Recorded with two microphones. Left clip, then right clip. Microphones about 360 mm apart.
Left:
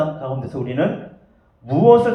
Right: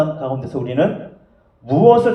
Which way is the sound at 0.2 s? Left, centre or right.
Right.